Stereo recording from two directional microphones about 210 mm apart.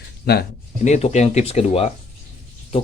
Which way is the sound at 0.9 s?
30° left (ahead or behind).